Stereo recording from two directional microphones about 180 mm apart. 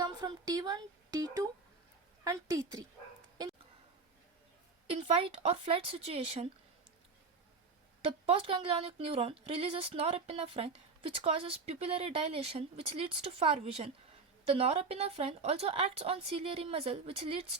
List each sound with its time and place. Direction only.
0.0 s speech: 20° right (ahead or behind)
4.9 s speech: 35° right (ahead or behind)
8.3 s speech: 30° right (ahead or behind)